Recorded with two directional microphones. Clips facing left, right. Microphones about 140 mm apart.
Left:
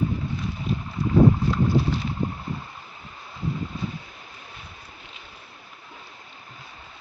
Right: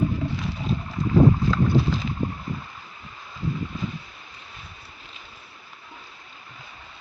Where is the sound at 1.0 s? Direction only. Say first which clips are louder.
Left 1 dB; 90° right.